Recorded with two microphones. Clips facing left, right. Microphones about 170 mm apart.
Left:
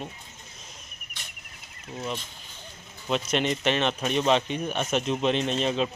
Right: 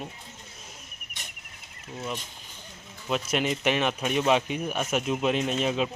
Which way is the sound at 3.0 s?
5° right (ahead or behind).